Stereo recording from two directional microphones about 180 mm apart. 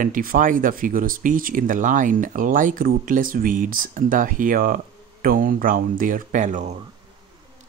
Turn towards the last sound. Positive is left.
turn(degrees=-45)  # may be behind; listen again after turning